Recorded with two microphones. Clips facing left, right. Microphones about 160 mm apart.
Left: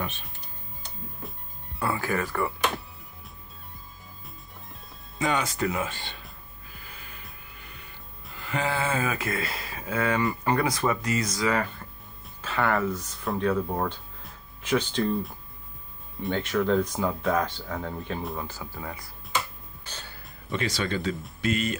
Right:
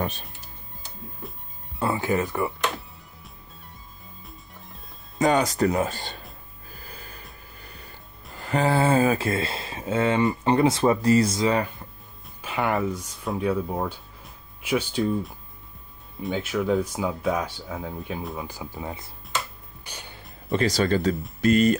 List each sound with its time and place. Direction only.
1.8 s speech: 20° right (ahead or behind)
5.2 s speech: 40° right (ahead or behind)
6.7 s music: 40° right (ahead or behind)
7.6 s speech: 40° right (ahead or behind)
12.4 s speech: 15° right (ahead or behind)
18.5 s speech: 20° right (ahead or behind)
19.8 s music: 15° right (ahead or behind)
20.5 s speech: 40° right (ahead or behind)